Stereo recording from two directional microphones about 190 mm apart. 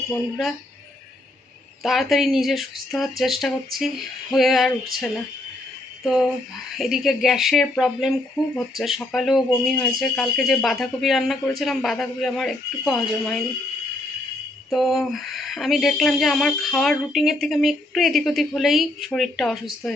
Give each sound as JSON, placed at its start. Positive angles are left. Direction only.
{"t": 0.1, "sound": "speech", "side_deg": 0}
{"t": 1.8, "sound": "speech", "side_deg": 0}
{"t": 6.0, "sound": "a sound", "side_deg": 0}
{"t": 6.7, "sound": "speech", "side_deg": 0}
{"t": 14.7, "sound": "speech", "side_deg": 0}